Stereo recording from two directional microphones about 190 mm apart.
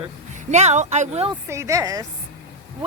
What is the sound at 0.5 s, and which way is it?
Speech, 35° right (ahead or behind).